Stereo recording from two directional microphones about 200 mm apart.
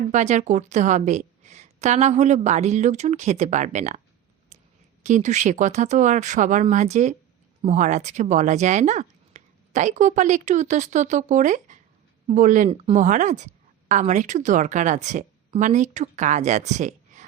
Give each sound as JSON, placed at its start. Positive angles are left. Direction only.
{"t": 0.1, "sound": "a woman's voice", "side_deg": -35}
{"t": 5.0, "sound": "a woman's voice", "side_deg": -35}